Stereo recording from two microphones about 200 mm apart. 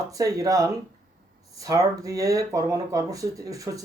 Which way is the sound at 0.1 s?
15° right (ahead or behind).